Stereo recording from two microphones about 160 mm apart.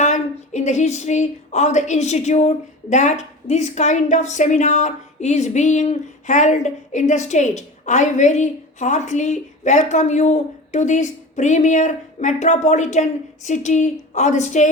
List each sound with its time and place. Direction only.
0.0 s a woman's voice: 45° left (ahead or behind)